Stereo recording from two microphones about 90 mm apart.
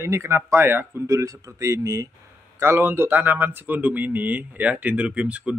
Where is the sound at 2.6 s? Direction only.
25° right (ahead or behind).